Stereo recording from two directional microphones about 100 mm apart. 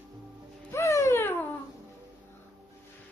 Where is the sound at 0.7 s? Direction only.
30° left (ahead or behind).